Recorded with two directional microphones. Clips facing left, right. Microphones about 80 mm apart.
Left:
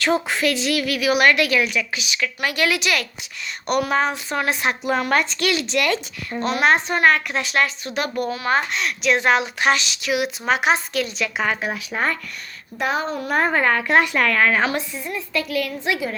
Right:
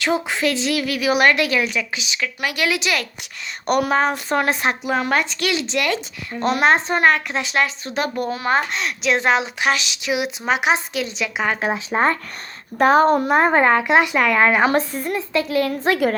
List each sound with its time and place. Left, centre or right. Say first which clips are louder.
0.0 s a woman's voice: even; centre
2.2 s a woman's voice: left 1 dB; centre
2.6 s a woman's voice: right 2 dB; right
4.9 s a woman's voice: left 2 dB; centre
6.4 s speech: right 2 dB; right
6.7 s a woman's voice: even; right
9.6 s a woman's voice: left 1 dB; centre
10.0 s a woman's voice: even; right
11.6 s speech: right 5 dB; right
12.8 s speech: right 10 dB; right
13.2 s a woman's voice: right 4 dB; right
14.7 s a woman's voice: right 6 dB; right
15.3 s a woman's voice: right 4 dB; right